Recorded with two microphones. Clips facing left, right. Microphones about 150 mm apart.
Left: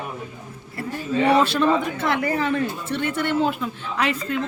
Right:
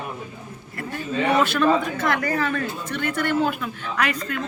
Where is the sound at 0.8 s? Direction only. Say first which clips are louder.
Left 3 dB; 30° left (ahead or behind).